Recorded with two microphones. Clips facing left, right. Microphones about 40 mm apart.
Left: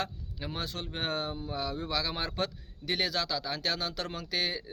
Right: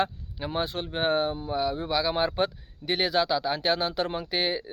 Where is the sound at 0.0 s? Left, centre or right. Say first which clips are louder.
Right 8 dB; right.